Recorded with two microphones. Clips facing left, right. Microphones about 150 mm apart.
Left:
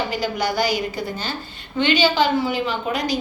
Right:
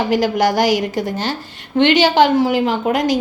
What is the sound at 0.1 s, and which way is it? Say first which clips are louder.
A woman's voice: right 8 dB; 90° right.